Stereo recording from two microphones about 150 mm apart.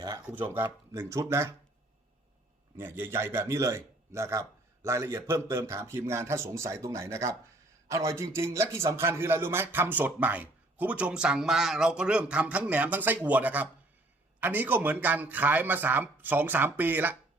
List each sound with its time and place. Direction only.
0.5 s a man's voice: 15° right (ahead or behind)
2.7 s a man's voice: 15° right (ahead or behind)